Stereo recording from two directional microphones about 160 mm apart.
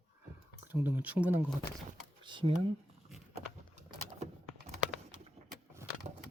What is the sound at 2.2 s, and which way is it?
Speech, 30° right (ahead or behind).